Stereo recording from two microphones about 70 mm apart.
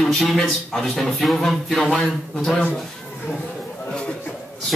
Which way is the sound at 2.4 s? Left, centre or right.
Centre.